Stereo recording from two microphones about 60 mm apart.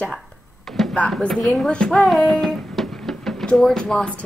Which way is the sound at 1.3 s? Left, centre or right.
Centre.